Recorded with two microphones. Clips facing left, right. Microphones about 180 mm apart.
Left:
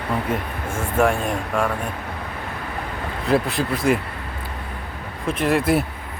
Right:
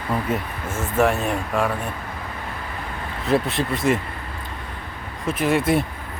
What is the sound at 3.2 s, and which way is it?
Speech, centre (ahead or behind).